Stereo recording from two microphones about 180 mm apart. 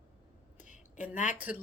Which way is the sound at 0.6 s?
45° left (ahead or behind).